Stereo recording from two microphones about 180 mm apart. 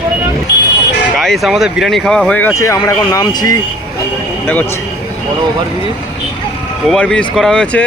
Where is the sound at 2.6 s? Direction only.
15° left (ahead or behind).